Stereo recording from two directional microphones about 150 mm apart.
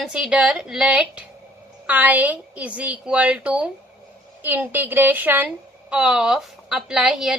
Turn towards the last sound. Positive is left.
turn(degrees=-5)  # may be behind; listen again after turning